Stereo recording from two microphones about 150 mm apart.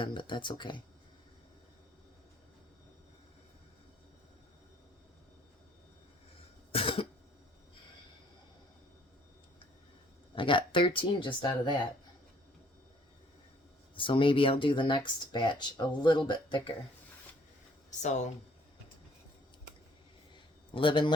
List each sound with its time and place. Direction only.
0.0 s speech: 35° left (ahead or behind)
6.7 s cough: 40° left (ahead or behind)
10.3 s speech: 35° left (ahead or behind)
13.9 s speech: 35° left (ahead or behind)
18.0 s speech: 50° left (ahead or behind)
20.3 s a sound: 35° left (ahead or behind)